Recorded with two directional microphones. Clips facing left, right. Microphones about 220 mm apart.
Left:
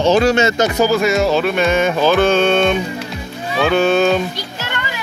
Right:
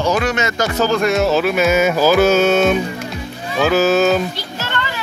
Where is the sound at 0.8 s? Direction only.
5° left (ahead or behind).